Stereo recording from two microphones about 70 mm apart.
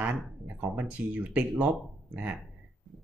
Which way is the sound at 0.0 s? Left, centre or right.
Right.